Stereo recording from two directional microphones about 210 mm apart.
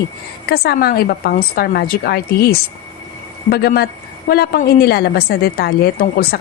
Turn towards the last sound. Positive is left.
turn(degrees=45)  # may be behind; listen again after turning